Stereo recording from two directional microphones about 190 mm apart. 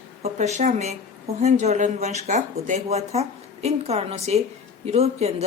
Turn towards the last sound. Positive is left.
turn(degrees=-35)  # may be behind; listen again after turning